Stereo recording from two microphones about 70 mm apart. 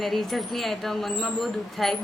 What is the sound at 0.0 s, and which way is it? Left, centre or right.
A woman's voice, centre.